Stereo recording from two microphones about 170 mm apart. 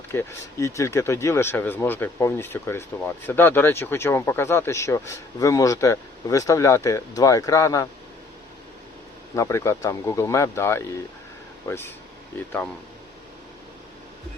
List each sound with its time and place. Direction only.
0.1 s speech: 15° left (ahead or behind)
9.3 s speech: 15° left (ahead or behind)